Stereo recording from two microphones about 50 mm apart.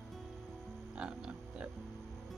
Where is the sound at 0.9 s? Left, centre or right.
Centre.